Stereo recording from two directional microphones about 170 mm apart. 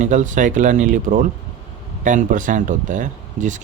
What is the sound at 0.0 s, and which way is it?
Speech, 45° right (ahead or behind).